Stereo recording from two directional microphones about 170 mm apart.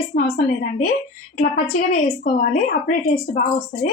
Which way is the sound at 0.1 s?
55° left (ahead or behind).